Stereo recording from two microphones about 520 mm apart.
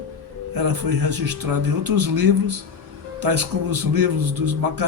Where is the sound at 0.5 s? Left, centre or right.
Right.